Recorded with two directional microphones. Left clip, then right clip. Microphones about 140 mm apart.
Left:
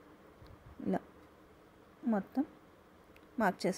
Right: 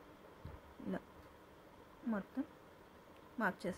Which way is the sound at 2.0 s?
40° left (ahead or behind).